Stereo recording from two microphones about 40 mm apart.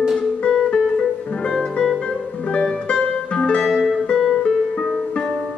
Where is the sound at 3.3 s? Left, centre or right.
Left.